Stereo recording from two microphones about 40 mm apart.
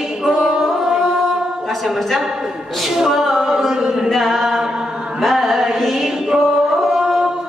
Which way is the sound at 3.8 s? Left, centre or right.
Centre.